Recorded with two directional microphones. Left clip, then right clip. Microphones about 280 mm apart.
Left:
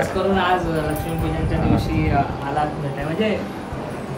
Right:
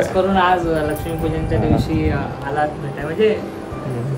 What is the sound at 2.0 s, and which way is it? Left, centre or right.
Speech, centre.